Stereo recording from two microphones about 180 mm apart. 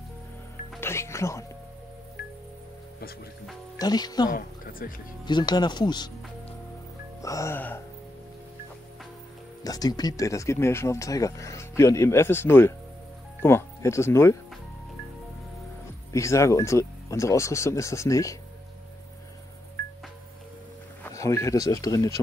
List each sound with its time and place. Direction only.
0.7 s speech: 15° left (ahead or behind)
3.7 s speech: 20° left (ahead or behind)
4.3 s a woman's voice: 50° left (ahead or behind)
5.2 s speech: 25° left (ahead or behind)
7.2 s speech: 15° left (ahead or behind)
9.6 s speech: 20° left (ahead or behind)
16.1 s speech: 15° left (ahead or behind)
21.0 s speech: 15° left (ahead or behind)